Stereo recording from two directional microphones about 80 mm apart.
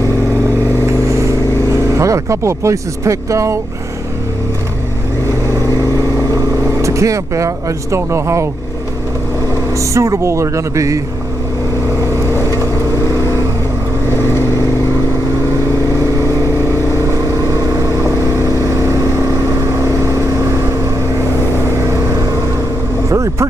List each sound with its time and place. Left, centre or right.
1.2 s vehicle: right
6.8 s speech: right
9.8 s speech: right
23.0 s vehicle: right